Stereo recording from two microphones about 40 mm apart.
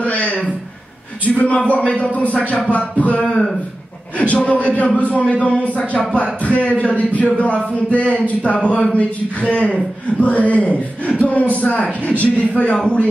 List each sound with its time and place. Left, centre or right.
0.0 s a sound: left
1.3 s speech: left
3.2 s a man's voice: left
4.2 s a man's voice: left